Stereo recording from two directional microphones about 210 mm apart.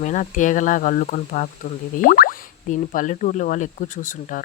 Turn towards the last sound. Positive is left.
turn(degrees=35)  # may be behind; listen again after turning